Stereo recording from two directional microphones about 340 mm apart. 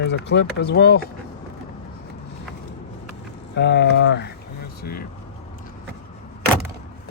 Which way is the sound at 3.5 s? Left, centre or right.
Left.